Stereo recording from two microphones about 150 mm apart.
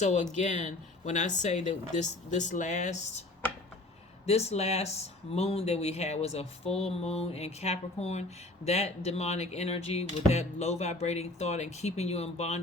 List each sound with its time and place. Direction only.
0.0 s speech: 50° left (ahead or behind)
4.3 s speech: 45° left (ahead or behind)